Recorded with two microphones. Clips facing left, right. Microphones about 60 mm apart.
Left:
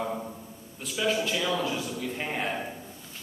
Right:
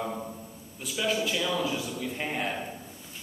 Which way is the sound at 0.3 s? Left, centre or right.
Centre.